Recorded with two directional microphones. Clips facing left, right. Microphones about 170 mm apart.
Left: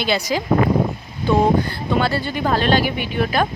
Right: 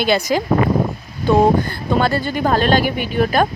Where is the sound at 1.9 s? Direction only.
45° right (ahead or behind).